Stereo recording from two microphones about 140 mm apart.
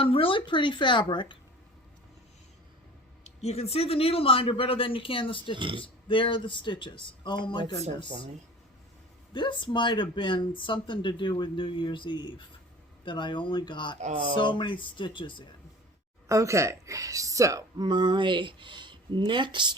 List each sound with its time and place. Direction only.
0.0 s speech: 40° left (ahead or behind)
3.2 s speech: 50° left (ahead or behind)
5.5 s speech: 35° right (ahead or behind)
5.8 s speech: 35° left (ahead or behind)
9.3 s speech: 35° left (ahead or behind)
16.3 s speech: 20° right (ahead or behind)